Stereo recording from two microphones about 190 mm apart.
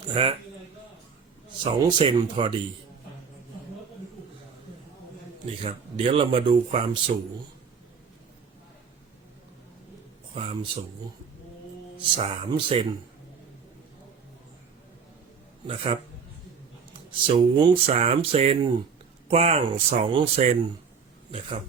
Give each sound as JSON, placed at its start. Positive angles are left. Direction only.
{"t": 0.1, "sound": "speech", "side_deg": -30}
{"t": 1.6, "sound": "speech", "side_deg": -25}
{"t": 5.6, "sound": "speech", "side_deg": -30}
{"t": 10.3, "sound": "speech", "side_deg": -30}
{"t": 11.9, "sound": "speech", "side_deg": -25}
{"t": 15.6, "sound": "speech", "side_deg": -25}